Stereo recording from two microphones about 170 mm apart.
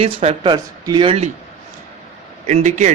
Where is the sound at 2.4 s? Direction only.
45° right (ahead or behind).